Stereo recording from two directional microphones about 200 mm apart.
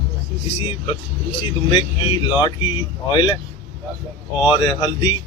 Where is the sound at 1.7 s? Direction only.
25° left (ahead or behind).